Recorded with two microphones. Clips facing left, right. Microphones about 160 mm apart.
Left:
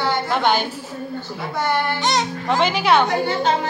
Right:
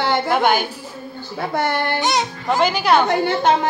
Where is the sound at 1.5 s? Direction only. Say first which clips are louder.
Even; 60° right (ahead or behind).